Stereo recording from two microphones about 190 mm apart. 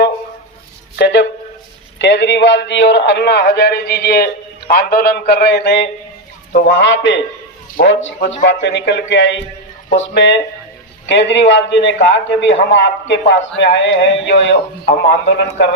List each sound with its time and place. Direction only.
0.9 s a man's voice: 65° left (ahead or behind)